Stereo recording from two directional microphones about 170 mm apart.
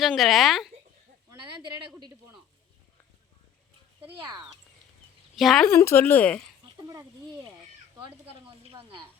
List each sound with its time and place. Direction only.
0.0 s speech: centre (ahead or behind)
4.2 s speech: 25° right (ahead or behind)
5.4 s speech: centre (ahead or behind)
5.7 s speech: 15° left (ahead or behind)
6.8 s speech: 20° right (ahead or behind)
7.9 s speech: 30° right (ahead or behind)